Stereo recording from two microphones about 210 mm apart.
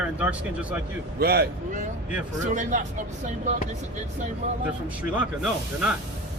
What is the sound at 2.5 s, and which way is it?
Speech, 35° right (ahead or behind).